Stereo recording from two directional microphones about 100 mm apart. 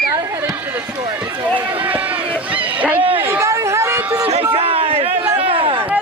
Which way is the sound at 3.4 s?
30° right (ahead or behind).